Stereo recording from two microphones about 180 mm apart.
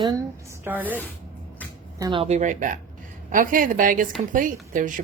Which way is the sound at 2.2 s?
40° right (ahead or behind).